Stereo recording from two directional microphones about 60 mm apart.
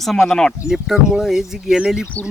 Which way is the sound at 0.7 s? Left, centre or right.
Centre.